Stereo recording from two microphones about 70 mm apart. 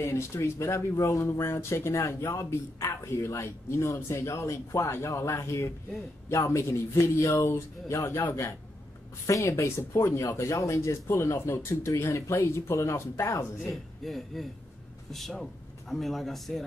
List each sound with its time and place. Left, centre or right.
0.0 s a man's voice: left
13.6 s a man's voice: centre